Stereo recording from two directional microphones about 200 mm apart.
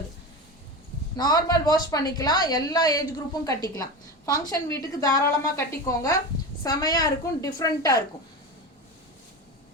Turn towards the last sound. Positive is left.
turn(degrees=20)  # may be behind; listen again after turning